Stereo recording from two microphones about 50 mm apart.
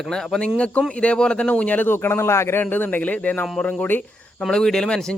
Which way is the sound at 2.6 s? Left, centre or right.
Left.